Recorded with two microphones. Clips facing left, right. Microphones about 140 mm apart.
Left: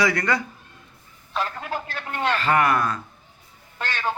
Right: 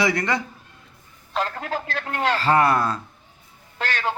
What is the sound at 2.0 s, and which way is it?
Speech, 30° right (ahead or behind).